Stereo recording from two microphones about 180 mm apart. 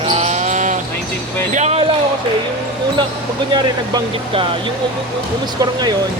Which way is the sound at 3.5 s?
25° right (ahead or behind).